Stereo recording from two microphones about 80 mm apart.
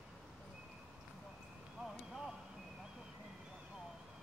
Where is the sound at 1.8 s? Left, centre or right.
Centre.